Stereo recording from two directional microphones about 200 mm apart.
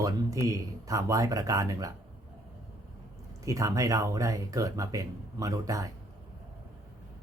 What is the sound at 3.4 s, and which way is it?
Speech, 15° right (ahead or behind).